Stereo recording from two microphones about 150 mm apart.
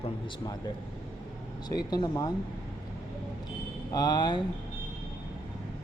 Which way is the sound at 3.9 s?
25° left (ahead or behind).